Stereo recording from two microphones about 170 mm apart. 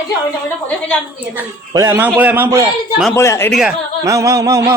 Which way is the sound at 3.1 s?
15° left (ahead or behind).